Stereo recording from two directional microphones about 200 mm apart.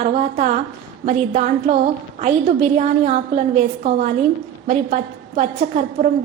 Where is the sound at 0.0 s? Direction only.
40° right (ahead or behind).